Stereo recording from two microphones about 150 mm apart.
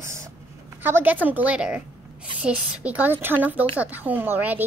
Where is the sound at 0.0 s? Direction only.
20° right (ahead or behind).